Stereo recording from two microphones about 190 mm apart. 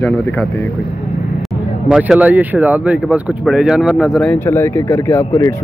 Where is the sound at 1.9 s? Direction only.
5° right (ahead or behind).